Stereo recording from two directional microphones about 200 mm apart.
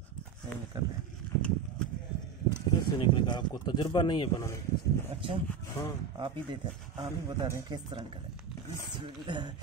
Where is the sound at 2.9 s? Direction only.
25° left (ahead or behind).